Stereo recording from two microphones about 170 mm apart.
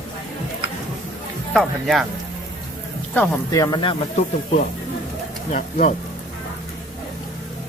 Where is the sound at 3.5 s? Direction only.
20° left (ahead or behind).